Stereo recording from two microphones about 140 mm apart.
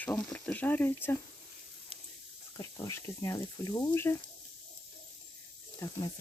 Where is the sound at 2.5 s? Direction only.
20° left (ahead or behind).